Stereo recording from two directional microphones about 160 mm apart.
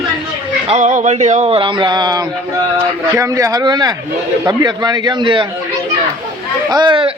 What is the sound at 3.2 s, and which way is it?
A man's voice, 20° right (ahead or behind).